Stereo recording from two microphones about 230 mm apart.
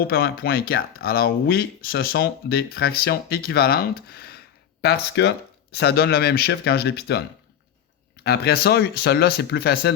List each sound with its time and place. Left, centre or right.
0.1 s speech: left